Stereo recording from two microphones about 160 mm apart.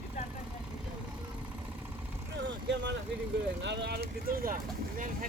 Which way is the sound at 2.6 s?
90° right.